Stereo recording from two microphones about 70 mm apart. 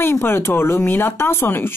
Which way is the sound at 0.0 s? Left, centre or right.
Left.